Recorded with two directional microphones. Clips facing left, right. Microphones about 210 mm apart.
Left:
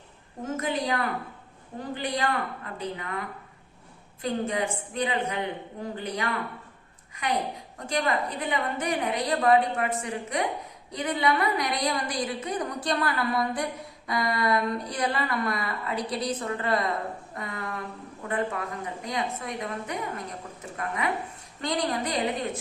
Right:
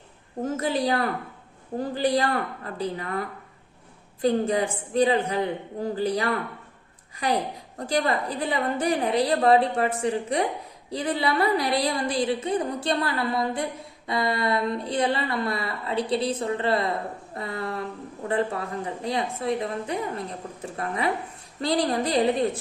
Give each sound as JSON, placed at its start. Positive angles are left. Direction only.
{"t": 0.5, "sound": "a woman's voice", "side_deg": -35}
{"t": 17.3, "sound": "a sound", "side_deg": -30}
{"t": 19.0, "sound": "a woman's voice", "side_deg": -30}